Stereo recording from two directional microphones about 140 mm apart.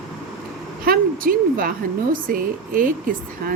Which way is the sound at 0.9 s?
90° right.